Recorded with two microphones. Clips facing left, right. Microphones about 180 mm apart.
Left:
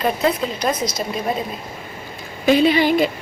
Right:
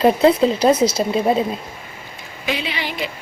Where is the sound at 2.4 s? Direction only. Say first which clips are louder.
Left 11 dB; 45° left (ahead or behind).